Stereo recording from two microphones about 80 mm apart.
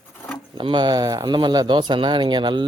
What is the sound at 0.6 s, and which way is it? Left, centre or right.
Speech, right.